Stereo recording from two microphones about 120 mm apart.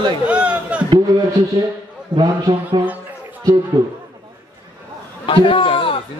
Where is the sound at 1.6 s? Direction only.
30° right (ahead or behind).